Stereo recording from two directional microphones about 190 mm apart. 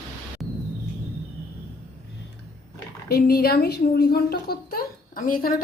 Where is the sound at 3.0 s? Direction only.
55° left (ahead or behind).